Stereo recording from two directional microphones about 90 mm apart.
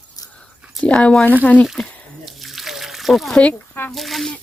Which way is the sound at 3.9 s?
Centre (ahead or behind).